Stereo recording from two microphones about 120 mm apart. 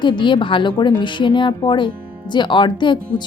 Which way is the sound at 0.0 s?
40° left (ahead or behind).